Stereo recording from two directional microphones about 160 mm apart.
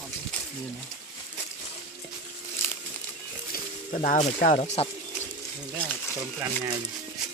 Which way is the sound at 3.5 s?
55° left (ahead or behind).